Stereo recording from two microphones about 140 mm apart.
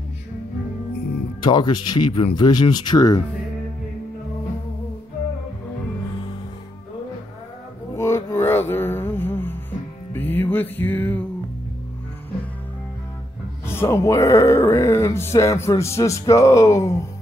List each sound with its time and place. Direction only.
1.4 s speech: 30° left (ahead or behind)
7.9 s music: 20° left (ahead or behind)
13.7 s music: 20° left (ahead or behind)